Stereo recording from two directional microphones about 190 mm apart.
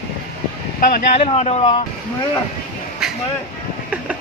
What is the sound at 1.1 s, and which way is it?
Speech, 30° left (ahead or behind).